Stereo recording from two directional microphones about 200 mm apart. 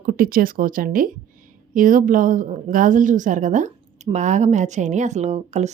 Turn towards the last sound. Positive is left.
turn(degrees=-35)  # may be behind; listen again after turning